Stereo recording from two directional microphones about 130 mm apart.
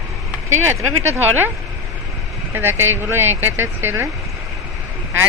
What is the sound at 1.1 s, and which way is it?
Speech, 15° right (ahead or behind).